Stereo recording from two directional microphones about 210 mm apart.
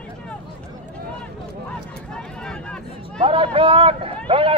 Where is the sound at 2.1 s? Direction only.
5° left (ahead or behind).